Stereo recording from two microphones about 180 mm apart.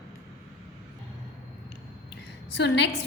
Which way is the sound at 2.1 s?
70° left (ahead or behind).